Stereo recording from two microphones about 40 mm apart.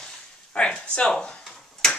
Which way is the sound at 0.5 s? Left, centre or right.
Left.